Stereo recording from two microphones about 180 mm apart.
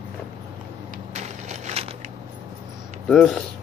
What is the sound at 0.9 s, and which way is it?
Crushing, 40° right (ahead or behind).